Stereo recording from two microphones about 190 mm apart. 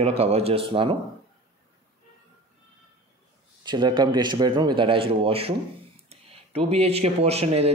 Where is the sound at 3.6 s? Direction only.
25° right (ahead or behind).